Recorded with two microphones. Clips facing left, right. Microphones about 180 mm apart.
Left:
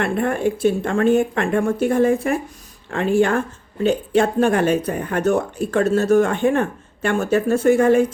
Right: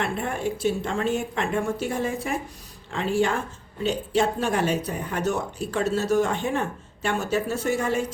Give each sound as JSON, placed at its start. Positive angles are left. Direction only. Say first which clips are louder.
{"t": 0.0, "sound": "speech", "louder": "left 7 dB", "side_deg": 55}